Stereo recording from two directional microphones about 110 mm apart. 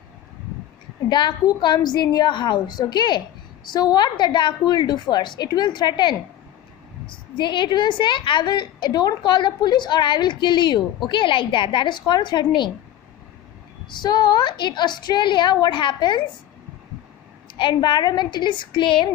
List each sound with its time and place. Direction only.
1.0 s a woman's voice: 40° left (ahead or behind)
13.8 s a woman's voice: 40° left (ahead or behind)
17.6 s a woman's voice: 45° left (ahead or behind)